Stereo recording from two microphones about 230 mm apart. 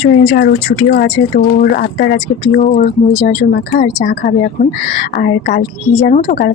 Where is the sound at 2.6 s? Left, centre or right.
Left.